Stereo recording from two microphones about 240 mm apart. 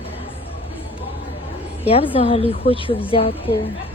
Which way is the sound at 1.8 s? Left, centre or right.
Left.